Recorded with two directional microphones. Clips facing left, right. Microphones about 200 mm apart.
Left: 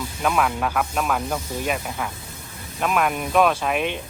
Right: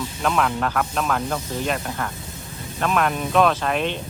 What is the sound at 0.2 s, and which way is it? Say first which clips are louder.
Speech: even; 5° left (ahead or behind).